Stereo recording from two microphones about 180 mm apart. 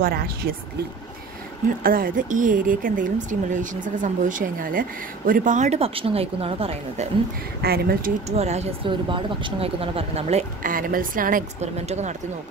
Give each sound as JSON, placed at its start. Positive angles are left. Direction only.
{"t": 0.0, "sound": "speech", "side_deg": -55}
{"t": 1.8, "sound": "a woman's voice", "side_deg": -50}
{"t": 7.6, "sound": "speech", "side_deg": -60}
{"t": 8.3, "sound": "speech", "side_deg": -35}